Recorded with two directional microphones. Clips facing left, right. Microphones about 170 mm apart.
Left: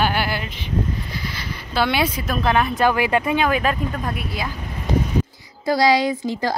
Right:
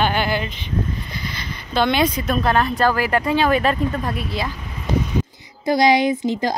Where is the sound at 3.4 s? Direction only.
5° left (ahead or behind).